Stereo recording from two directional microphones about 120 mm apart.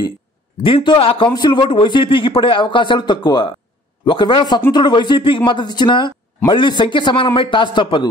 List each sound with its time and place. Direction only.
0.6 s a man's voice: 50° left (ahead or behind)